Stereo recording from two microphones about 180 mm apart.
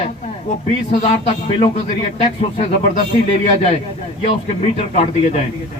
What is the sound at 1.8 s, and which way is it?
Speech, 35° left (ahead or behind).